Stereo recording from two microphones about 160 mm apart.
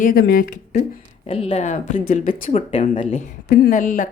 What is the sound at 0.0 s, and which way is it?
Speech, 65° left (ahead or behind).